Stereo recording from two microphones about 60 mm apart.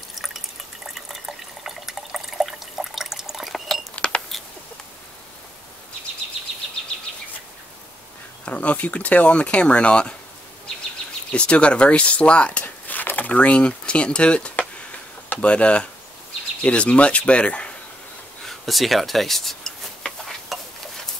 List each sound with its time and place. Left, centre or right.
0.8 s water: centre
3.9 s a sound: centre
8.5 s speech: left
11.3 s speech: centre
18.4 s tick-tock: centre
20.5 s a sound: centre